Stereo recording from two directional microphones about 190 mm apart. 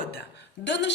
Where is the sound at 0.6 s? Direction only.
65° left (ahead or behind).